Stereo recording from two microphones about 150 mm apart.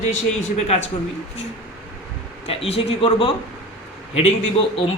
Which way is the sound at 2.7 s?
40° left (ahead or behind).